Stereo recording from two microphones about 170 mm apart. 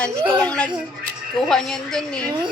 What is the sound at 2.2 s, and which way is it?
Speech, 25° right (ahead or behind).